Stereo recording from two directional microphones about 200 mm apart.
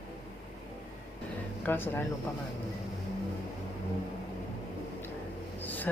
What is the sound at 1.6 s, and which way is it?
Speech, 10° left (ahead or behind).